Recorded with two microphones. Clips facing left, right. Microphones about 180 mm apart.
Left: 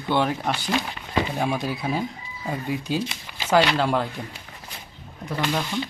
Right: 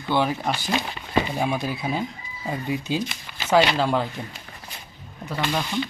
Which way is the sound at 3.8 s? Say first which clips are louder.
Even; centre (ahead or behind).